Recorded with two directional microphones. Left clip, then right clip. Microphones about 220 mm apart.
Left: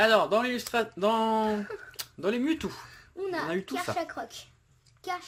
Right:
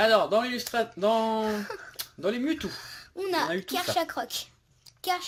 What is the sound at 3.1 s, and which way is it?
A child's voice, 40° right (ahead or behind).